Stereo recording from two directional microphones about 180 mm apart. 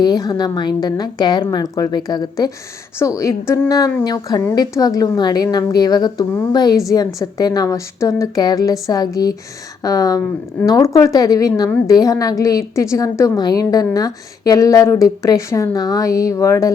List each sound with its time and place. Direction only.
0.0 s a woman's voice: 20° left (ahead or behind)